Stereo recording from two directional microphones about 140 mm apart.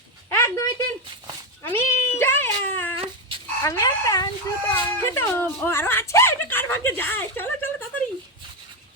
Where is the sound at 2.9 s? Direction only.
40° right (ahead or behind).